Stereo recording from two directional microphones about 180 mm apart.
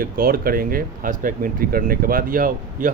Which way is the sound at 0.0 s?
55° right (ahead or behind).